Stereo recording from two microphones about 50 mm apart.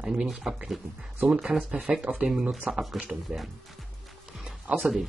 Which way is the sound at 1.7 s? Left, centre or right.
Right.